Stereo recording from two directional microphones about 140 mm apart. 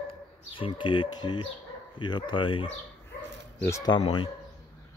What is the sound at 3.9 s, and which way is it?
Speech, 35° left (ahead or behind).